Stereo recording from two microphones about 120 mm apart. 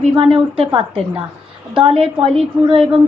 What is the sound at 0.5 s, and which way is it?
A woman's voice, 50° right (ahead or behind).